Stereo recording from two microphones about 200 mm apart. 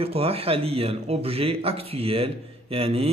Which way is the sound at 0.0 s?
30° right (ahead or behind).